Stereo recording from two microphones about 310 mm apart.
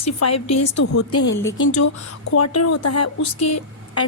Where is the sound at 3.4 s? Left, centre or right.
Left.